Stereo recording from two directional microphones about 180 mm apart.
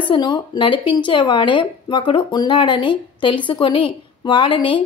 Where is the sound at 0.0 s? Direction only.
25° left (ahead or behind).